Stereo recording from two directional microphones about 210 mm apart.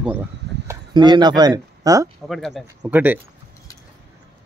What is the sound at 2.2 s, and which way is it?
Speech, centre (ahead or behind).